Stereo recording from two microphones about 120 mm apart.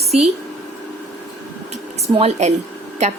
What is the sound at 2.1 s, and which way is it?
Speech, 60° right (ahead or behind).